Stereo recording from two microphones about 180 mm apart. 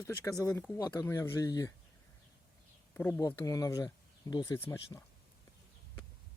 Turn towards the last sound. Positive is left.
turn(degrees=15)  # may be behind; listen again after turning